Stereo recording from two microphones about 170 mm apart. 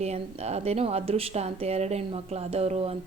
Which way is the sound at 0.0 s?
40° right (ahead or behind).